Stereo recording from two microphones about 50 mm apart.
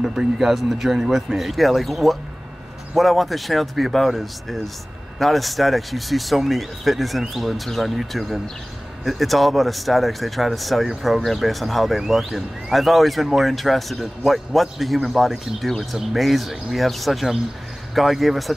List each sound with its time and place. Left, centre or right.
0.0 s speech: centre